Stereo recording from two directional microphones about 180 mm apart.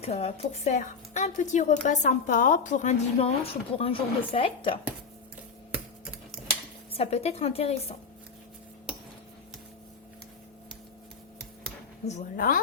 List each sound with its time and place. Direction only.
0.0 s speech: 35° left (ahead or behind)
6.9 s speech: 35° left (ahead or behind)
12.0 s a woman's voice: 45° left (ahead or behind)